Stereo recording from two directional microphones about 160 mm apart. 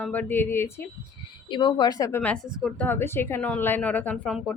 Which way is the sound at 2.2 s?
10° left (ahead or behind).